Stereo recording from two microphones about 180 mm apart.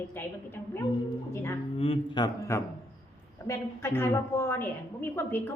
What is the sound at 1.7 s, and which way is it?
A man's voice, 30° left (ahead or behind).